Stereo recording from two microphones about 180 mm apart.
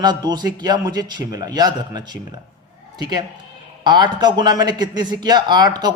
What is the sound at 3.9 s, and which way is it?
Speech, 25° right (ahead or behind).